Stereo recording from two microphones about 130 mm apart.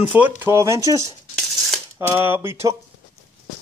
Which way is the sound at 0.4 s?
20° right (ahead or behind).